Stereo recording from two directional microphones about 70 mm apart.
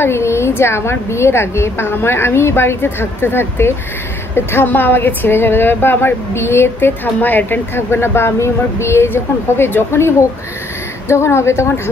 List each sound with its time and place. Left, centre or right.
0.0 s a woman's voice: left